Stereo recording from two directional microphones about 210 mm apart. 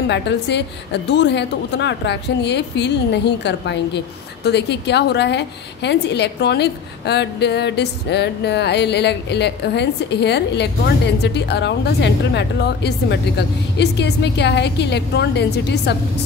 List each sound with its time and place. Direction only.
0.1 s a woman's voice: 55° left (ahead or behind)